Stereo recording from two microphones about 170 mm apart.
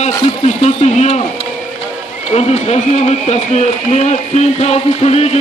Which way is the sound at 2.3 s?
40° left (ahead or behind).